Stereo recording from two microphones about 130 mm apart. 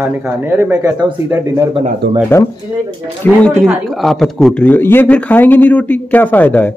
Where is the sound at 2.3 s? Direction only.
20° left (ahead or behind).